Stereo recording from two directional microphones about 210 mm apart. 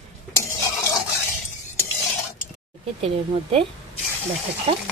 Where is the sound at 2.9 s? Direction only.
25° right (ahead or behind).